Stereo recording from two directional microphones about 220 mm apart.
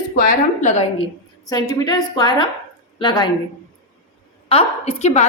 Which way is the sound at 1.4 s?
20° left (ahead or behind).